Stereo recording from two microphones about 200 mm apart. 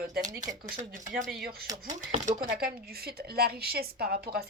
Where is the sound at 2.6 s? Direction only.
50° right (ahead or behind).